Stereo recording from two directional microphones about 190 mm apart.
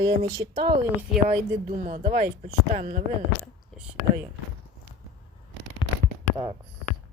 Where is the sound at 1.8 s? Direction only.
35° right (ahead or behind).